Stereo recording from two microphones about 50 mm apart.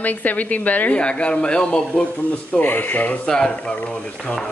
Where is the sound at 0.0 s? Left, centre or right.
Left.